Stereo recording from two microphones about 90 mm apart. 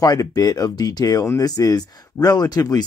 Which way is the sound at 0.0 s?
45° left (ahead or behind).